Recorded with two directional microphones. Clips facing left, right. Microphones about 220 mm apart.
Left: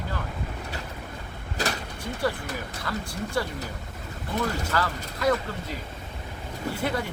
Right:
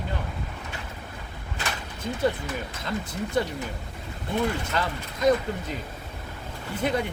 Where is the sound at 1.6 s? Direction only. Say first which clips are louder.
Left 5 dB; 40° left (ahead or behind).